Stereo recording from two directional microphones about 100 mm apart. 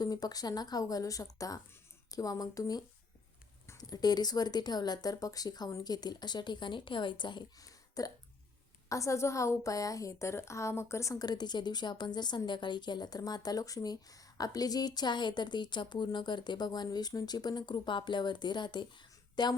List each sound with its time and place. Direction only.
0.0 s a woman's voice: 40° left (ahead or behind)
7.6 s a sound: 35° left (ahead or behind)
8.9 s a woman's voice: 30° left (ahead or behind); by 19.5 s 50° left (ahead or behind)